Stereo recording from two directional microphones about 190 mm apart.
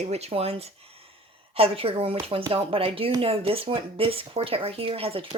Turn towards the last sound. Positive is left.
turn(degrees=-30)  # may be behind; listen again after turning